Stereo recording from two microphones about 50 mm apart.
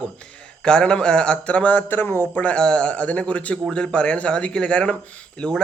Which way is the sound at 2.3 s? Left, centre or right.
Left.